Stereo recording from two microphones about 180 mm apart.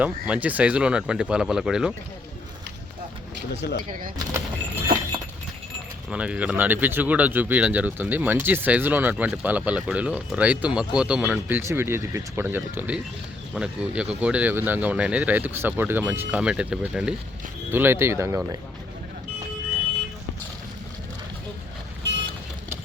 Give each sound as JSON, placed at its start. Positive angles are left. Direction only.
{"t": 0.0, "sound": "speech", "side_deg": -10}
{"t": 3.6, "sound": "speech", "side_deg": 65}
{"t": 6.1, "sound": "speech", "side_deg": -5}
{"t": 22.0, "sound": "vehicle", "side_deg": -75}